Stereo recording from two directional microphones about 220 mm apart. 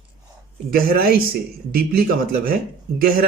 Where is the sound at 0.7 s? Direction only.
45° right (ahead or behind).